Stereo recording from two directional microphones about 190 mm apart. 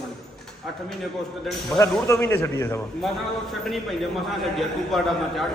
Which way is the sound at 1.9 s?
15° left (ahead or behind).